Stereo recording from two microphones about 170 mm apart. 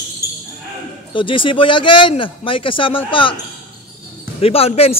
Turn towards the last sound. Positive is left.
turn(degrees=35)  # may be behind; listen again after turning